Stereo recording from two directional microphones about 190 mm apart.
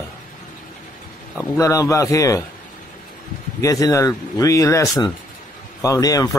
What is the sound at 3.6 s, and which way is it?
Speech, 15° left (ahead or behind).